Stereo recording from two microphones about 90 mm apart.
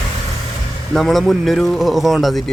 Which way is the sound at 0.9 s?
Centre (ahead or behind).